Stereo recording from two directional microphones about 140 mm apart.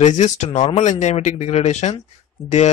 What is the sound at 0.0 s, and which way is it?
Speech, 55° left (ahead or behind).